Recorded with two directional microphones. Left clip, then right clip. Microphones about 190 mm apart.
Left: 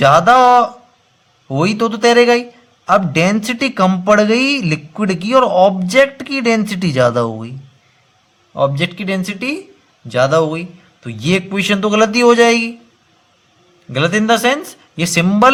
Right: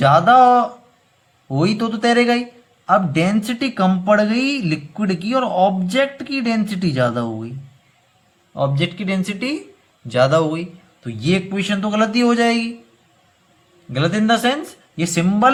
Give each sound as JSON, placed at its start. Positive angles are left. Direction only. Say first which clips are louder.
{"t": 0.0, "sound": "a man's voice", "louder": "left 3 dB", "side_deg": 40}
{"t": 8.5, "sound": "a man's voice", "louder": "left 5 dB", "side_deg": 35}
{"t": 13.9, "sound": "a man's voice", "louder": "left 4 dB", "side_deg": 35}